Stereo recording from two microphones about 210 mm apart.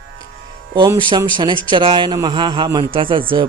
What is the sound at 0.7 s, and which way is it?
A man's voice, 20° right (ahead or behind).